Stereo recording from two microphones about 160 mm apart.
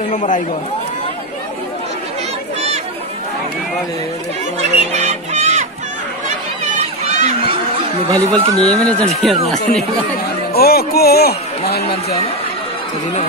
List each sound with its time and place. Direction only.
0.1 s a man's voice: 50° left (ahead or behind)
4.9 s a sound: 45° right (ahead or behind)
6.8 s chatter: 40° right (ahead or behind)
8.6 s speech: 5° left (ahead or behind)
10.5 s music: 75° left (ahead or behind)